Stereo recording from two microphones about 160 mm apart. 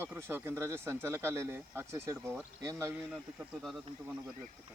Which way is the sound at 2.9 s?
10° right (ahead or behind).